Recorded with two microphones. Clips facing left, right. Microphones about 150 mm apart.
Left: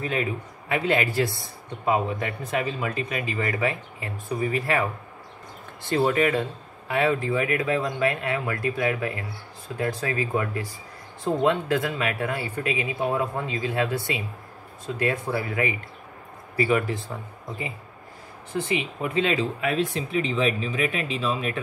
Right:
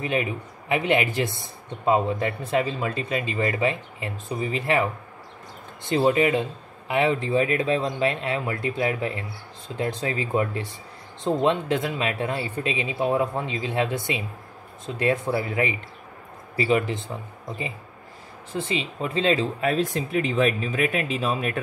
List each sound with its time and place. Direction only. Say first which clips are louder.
0.0 s speech: right 1 dB; 20° right (ahead or behind)
5.9 s speech: right 2 dB; 20° right (ahead or behind)
18.7 s speech: even; 25° right (ahead or behind); by 21.5 s 45° right (ahead or behind)